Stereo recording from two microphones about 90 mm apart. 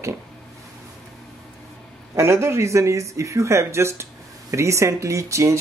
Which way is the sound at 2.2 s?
30° right (ahead or behind).